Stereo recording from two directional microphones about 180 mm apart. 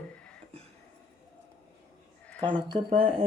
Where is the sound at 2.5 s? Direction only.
30° right (ahead or behind).